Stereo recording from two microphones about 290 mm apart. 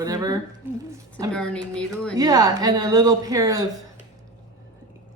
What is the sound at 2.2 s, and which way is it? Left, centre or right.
Speech, centre.